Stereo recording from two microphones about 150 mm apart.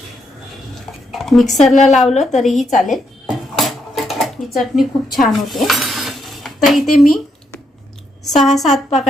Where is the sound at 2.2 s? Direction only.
Centre (ahead or behind).